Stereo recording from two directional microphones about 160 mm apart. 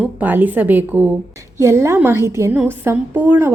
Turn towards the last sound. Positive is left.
turn(degrees=-15)  # may be behind; listen again after turning